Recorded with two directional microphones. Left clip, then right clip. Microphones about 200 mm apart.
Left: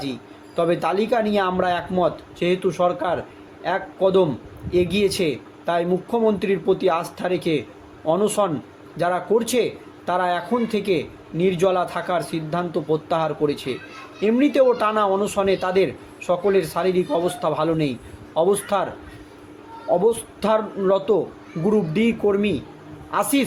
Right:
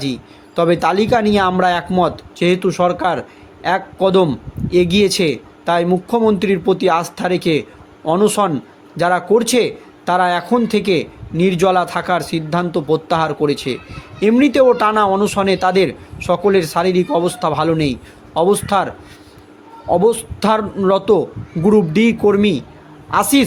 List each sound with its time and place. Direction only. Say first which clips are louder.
0.0 s a man's voice: right 6 dB; 50° right (ahead or behind)
19.9 s a man's voice: right 5 dB; 50° right (ahead or behind)